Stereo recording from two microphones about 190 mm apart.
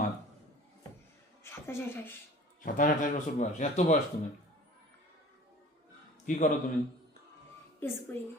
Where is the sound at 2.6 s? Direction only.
45° left (ahead or behind).